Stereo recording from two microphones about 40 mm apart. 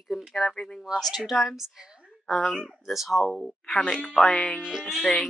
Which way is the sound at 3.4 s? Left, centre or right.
Centre.